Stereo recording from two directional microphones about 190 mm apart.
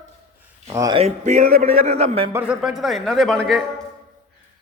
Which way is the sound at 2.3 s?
5° right (ahead or behind).